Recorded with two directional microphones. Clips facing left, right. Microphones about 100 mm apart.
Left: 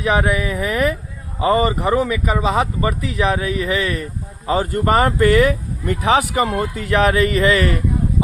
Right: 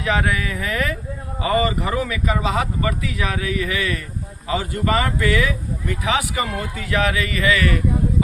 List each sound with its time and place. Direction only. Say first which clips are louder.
0.0 s speech: left 4 dB; 20° left (ahead or behind)
4.4 s speech: left 4 dB; 40° left (ahead or behind)